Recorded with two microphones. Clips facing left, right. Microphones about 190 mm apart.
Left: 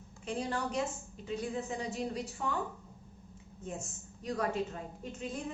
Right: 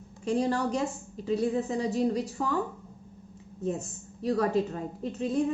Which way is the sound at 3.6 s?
35° right (ahead or behind).